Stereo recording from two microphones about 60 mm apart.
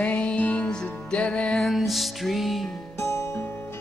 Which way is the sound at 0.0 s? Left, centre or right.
Left.